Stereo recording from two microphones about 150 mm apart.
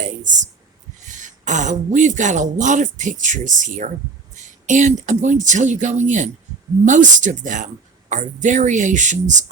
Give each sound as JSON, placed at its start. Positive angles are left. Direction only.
{"t": 1.0, "sound": "speech", "side_deg": -55}